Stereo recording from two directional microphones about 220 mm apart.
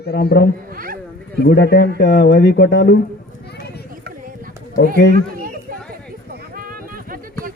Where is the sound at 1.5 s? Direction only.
50° left (ahead or behind).